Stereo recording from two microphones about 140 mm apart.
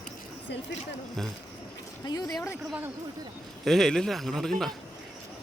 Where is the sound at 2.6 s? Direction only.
10° right (ahead or behind).